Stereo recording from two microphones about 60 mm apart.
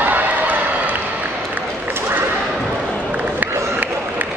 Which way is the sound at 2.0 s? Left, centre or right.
Right.